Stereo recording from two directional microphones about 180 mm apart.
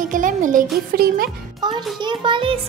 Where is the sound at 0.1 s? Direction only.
45° right (ahead or behind).